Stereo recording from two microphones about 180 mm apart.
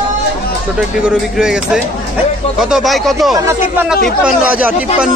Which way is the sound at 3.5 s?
10° right (ahead or behind).